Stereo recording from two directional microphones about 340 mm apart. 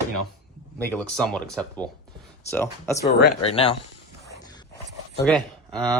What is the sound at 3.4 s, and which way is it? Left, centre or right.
Speech, centre.